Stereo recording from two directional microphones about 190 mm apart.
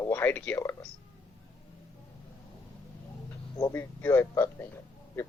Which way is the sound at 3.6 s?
15° left (ahead or behind).